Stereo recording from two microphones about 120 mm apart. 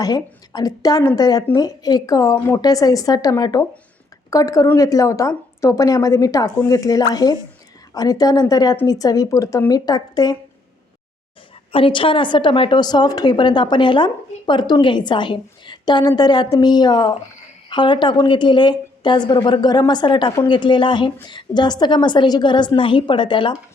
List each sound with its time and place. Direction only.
0.0 s a woman's voice: 30° left (ahead or behind)
11.7 s a woman's voice: 45° left (ahead or behind)